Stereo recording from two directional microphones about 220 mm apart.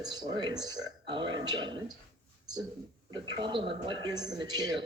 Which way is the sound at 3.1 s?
20° right (ahead or behind).